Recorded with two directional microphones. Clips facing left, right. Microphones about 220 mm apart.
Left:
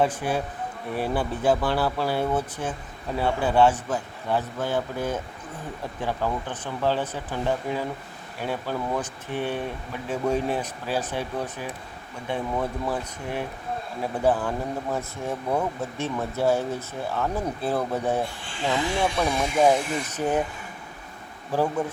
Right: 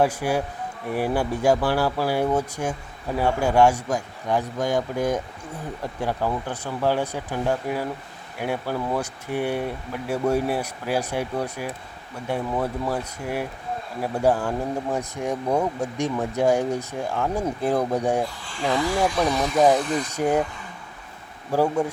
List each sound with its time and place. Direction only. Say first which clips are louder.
0.0 s speech: right 2 dB; 10° right (ahead or behind)
18.8 s speech: right 3 dB; 25° left (ahead or behind)
19.1 s speech: right 2 dB; 10° left (ahead or behind)
20.1 s speech: right 3 dB; 10° right (ahead or behind)
21.5 s speech: right 3 dB; 10° right (ahead or behind)